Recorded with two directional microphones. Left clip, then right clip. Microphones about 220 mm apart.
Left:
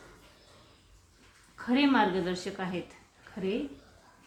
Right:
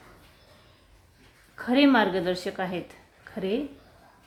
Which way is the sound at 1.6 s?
50° right (ahead or behind).